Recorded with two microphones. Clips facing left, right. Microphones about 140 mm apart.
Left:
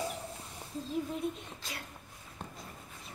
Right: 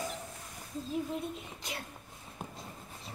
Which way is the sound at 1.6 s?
20° right (ahead or behind).